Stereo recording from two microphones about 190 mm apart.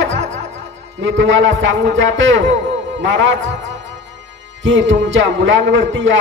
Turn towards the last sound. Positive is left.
turn(degrees=-80)